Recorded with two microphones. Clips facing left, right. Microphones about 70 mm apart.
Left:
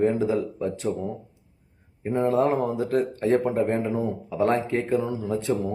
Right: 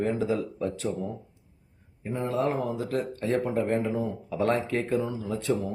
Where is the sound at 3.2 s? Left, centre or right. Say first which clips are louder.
Left 4 dB; left.